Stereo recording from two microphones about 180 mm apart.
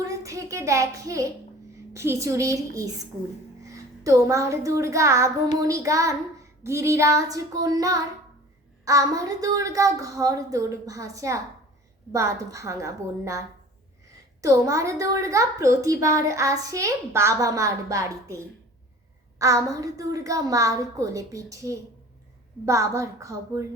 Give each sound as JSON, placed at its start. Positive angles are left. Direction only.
{"t": 0.0, "sound": "a child's voice", "side_deg": -20}
{"t": 6.6, "sound": "child singing", "side_deg": -15}
{"t": 8.8, "sound": "a woman's voice", "side_deg": -20}
{"t": 14.4, "sound": "a woman's voice", "side_deg": -15}